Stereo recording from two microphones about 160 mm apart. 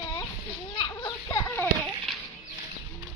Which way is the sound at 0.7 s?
25° left (ahead or behind).